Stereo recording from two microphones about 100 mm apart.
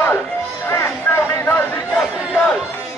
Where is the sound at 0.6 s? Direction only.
25° left (ahead or behind).